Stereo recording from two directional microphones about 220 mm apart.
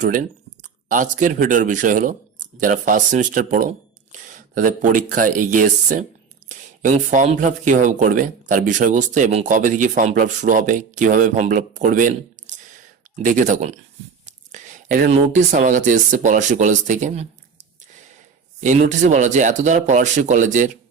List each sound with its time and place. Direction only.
0.0 s speech: 35° right (ahead or behind)
12.5 s a sound: 35° right (ahead or behind)
13.2 s speech: 35° right (ahead or behind)
18.6 s speech: 35° right (ahead or behind)